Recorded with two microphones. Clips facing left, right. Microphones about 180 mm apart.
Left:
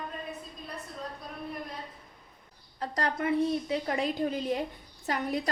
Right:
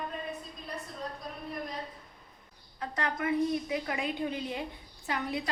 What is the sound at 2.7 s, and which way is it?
A woman's voice, 35° left (ahead or behind).